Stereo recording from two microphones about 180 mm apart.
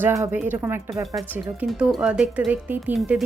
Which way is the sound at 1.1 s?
5° right (ahead or behind).